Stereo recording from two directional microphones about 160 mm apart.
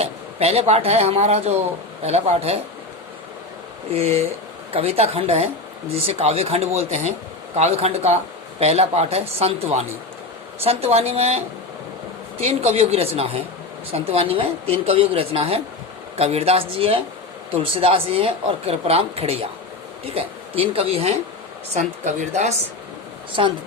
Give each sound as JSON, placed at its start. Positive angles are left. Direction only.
{"t": 0.0, "sound": "speech", "side_deg": -40}
{"t": 3.9, "sound": "a woman's voice", "side_deg": -40}